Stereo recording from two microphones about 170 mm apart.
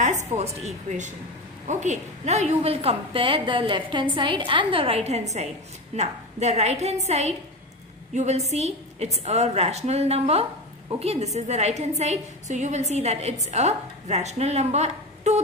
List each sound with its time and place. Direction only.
0.0 s a woman's voice: 45° right (ahead or behind)